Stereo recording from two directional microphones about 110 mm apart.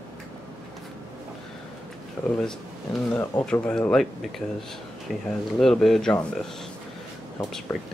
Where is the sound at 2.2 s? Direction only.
20° left (ahead or behind).